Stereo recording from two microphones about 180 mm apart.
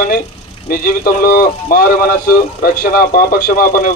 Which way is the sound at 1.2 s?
55° left (ahead or behind).